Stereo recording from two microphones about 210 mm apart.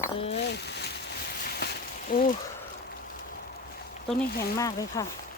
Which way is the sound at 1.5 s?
50° left (ahead or behind).